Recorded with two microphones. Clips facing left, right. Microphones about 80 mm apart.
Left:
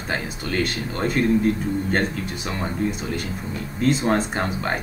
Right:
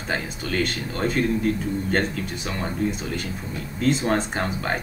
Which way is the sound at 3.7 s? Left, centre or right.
Centre.